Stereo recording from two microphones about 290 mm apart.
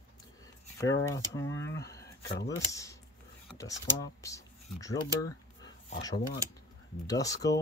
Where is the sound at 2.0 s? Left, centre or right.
Left.